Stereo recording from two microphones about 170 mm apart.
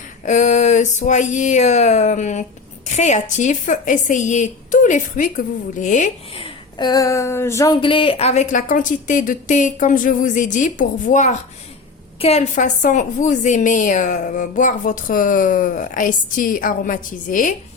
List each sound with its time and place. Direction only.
0.3 s a woman's voice: 45° left (ahead or behind)
6.3 s a woman's voice: 30° left (ahead or behind); by 17.5 s 50° left (ahead or behind)